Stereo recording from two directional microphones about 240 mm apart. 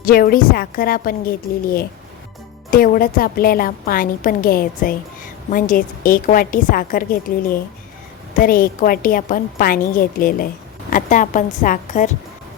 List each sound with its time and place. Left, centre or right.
0.0 s a woman's voice: left
2.6 s a woman's voice: left